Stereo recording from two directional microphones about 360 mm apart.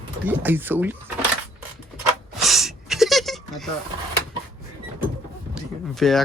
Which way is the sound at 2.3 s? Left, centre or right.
Centre.